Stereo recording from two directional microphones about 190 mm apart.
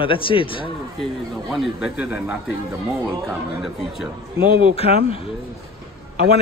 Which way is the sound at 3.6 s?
Centre (ahead or behind).